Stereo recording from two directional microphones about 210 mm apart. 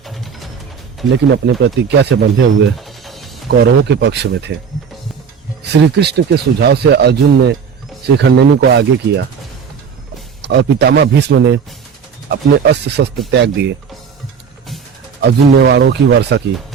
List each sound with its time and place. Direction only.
0.0 s music: centre (ahead or behind)
1.6 s speech: 55° right (ahead or behind)
2.7 s music: centre (ahead or behind)
3.5 s speech: 55° right (ahead or behind)
5.7 s speech: 50° right (ahead or behind)
10.4 s speech: 55° right (ahead or behind)
15.2 s speech: 55° right (ahead or behind)